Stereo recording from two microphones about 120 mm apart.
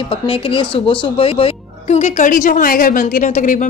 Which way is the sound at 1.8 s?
75° left (ahead or behind).